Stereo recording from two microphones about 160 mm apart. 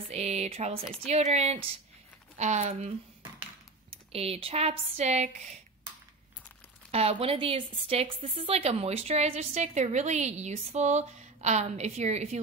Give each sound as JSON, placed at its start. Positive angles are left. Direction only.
{"t": 0.1, "sound": "speech", "side_deg": -45}
{"t": 6.9, "sound": "speech", "side_deg": -40}